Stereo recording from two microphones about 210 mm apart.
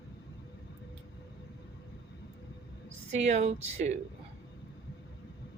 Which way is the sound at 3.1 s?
35° right (ahead or behind).